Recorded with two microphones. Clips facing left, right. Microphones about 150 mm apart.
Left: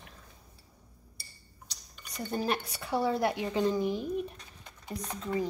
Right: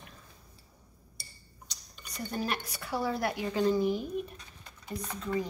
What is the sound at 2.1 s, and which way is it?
Speech, 25° left (ahead or behind).